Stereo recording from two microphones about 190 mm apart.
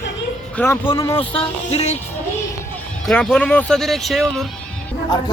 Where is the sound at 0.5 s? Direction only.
10° left (ahead or behind).